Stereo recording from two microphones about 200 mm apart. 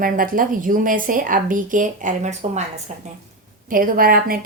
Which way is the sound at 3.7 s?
45° right (ahead or behind).